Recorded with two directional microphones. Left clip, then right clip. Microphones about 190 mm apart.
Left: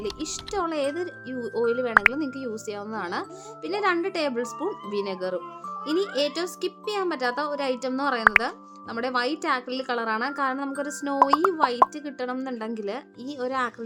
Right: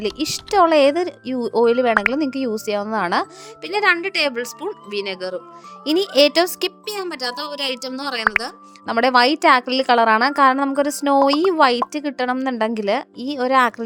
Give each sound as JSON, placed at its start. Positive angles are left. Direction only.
{"t": 0.0, "sound": "a woman's voice", "side_deg": -50}
{"t": 1.9, "sound": "speech", "side_deg": 0}
{"t": 2.1, "sound": "a woman's voice", "side_deg": -45}
{"t": 8.2, "sound": "speech", "side_deg": 0}
{"t": 8.9, "sound": "a woman's voice", "side_deg": -50}